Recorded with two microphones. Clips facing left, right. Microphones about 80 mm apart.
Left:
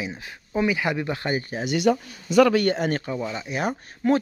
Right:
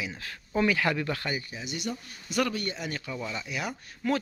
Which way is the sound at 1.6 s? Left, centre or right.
Left.